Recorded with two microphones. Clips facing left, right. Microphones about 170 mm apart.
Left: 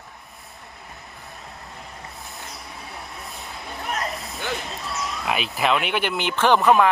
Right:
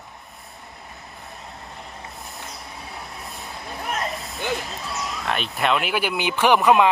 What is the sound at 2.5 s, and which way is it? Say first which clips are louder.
Vehicle: right 1 dB; centre (ahead or behind).